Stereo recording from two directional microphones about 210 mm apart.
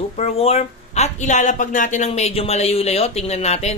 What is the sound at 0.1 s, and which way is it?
Speech, 30° left (ahead or behind).